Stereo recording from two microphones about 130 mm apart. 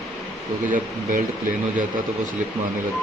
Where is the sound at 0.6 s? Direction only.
85° right.